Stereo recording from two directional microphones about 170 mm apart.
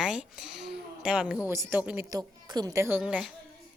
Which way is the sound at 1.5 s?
10° right (ahead or behind).